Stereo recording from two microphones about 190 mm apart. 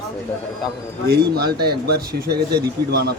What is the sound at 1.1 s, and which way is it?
Speech, 55° right (ahead or behind).